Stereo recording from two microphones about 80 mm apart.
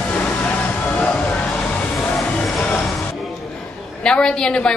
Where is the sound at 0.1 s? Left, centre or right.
Centre.